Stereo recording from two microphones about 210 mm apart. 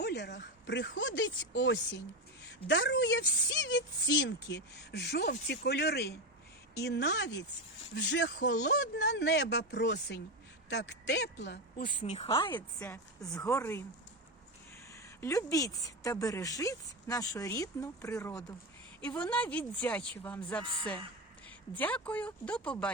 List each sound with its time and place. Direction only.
0.0 s a woman's voice: 55° left (ahead or behind)
11.9 s speech: 35° left (ahead or behind)
12.8 s speech: 15° left (ahead or behind)
15.2 s speech: 15° left (ahead or behind)